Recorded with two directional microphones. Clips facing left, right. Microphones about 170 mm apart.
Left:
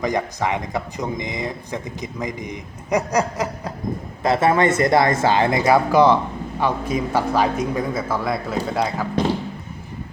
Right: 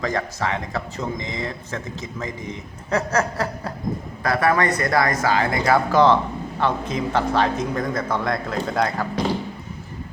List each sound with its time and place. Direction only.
0.0 s speech: 20° left (ahead or behind)
5.7 s speech: 10° left (ahead or behind)